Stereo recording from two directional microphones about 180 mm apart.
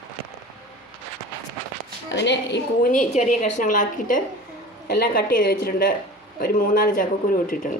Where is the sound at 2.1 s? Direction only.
75° left (ahead or behind).